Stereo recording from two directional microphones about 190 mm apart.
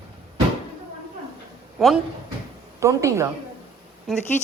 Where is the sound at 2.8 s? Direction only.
15° right (ahead or behind).